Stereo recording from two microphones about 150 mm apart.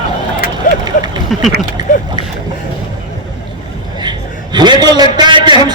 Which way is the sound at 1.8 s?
25° right (ahead or behind).